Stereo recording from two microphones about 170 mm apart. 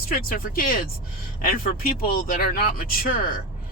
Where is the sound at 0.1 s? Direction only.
60° left (ahead or behind).